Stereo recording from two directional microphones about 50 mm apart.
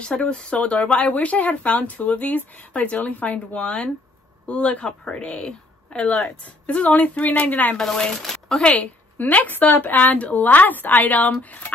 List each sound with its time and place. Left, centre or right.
0.0 s a woman's voice: centre; by 7.7 s left
7.7 s speech: centre
8.6 s a woman's voice: left